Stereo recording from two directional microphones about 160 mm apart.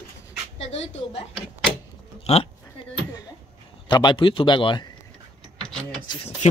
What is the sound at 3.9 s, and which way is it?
Speech, 30° left (ahead or behind).